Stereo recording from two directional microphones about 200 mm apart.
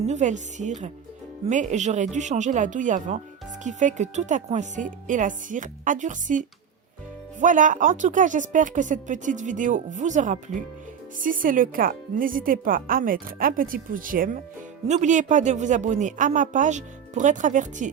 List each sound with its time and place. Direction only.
0.0 s a woman's voice: 35° right (ahead or behind)